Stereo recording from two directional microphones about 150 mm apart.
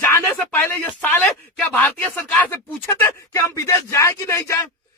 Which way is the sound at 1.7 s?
10° left (ahead or behind).